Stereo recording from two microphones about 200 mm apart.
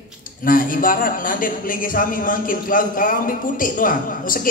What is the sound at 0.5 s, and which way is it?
A man's voice, 45° left (ahead or behind).